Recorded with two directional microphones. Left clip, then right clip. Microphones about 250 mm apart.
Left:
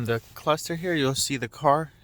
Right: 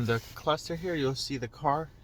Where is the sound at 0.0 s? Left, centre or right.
Left.